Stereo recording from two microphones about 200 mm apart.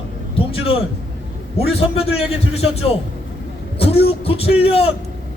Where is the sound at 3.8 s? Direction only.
30° left (ahead or behind).